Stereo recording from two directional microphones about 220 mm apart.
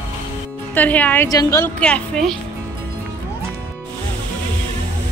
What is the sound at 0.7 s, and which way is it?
A woman's voice, 5° left (ahead or behind).